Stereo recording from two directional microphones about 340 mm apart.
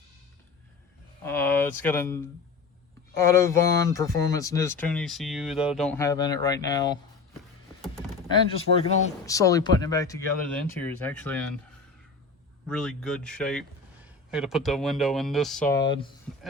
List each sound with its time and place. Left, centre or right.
1.2 s speech: centre
12.7 s speech: centre